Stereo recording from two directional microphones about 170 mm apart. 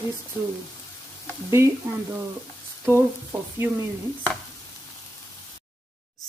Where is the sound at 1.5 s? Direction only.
15° right (ahead or behind).